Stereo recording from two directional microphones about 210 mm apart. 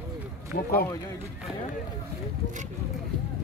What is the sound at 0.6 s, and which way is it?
Speech, 45° left (ahead or behind).